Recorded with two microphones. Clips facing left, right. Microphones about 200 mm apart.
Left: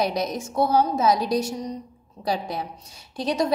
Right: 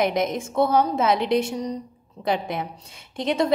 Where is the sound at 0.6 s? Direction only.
60° right (ahead or behind).